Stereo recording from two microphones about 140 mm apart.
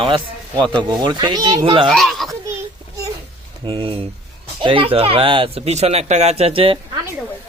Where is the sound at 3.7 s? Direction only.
40° right (ahead or behind).